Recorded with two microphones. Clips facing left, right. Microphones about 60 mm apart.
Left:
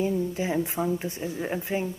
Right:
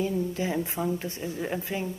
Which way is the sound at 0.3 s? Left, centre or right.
Centre.